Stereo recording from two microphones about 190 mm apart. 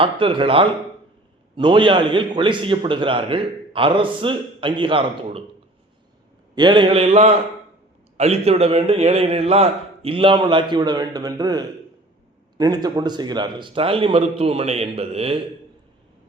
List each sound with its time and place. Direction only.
0.0 s a man's voice: 25° right (ahead or behind)
6.6 s a man's voice: 25° right (ahead or behind)